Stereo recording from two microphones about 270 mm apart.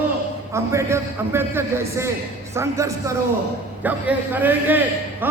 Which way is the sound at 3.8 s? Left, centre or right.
Centre.